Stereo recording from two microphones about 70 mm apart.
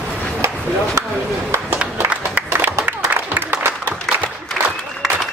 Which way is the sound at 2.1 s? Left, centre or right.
Right.